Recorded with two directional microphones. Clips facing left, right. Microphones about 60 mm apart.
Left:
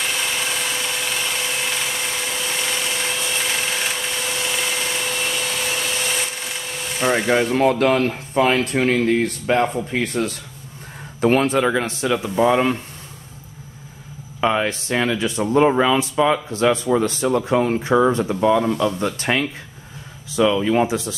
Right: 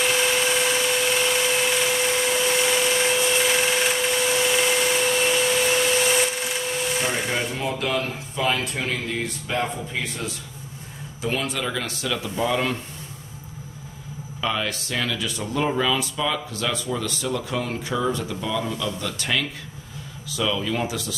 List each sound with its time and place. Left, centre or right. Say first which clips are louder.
0.0 s a sound: right 3 dB; centre
6.0 s wood: right 3 dB; centre
7.2 s a man's voice: left 9 dB; left
14.4 s a man's voice: left 7 dB; left